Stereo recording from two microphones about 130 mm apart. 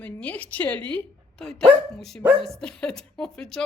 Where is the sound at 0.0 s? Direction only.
10° left (ahead or behind).